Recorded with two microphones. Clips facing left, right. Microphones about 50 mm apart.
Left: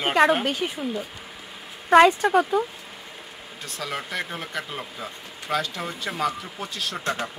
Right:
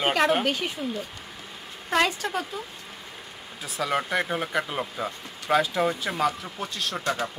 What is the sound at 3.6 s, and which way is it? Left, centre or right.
Speech, centre.